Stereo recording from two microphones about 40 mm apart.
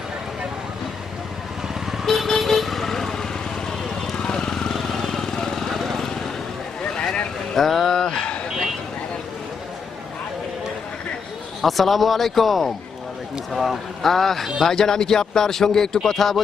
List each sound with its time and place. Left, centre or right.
2.0 s vehicle: centre
6.9 s vehicle: centre
7.5 s a sound: centre; by 8.4 s left
11.6 s a man's voice: centre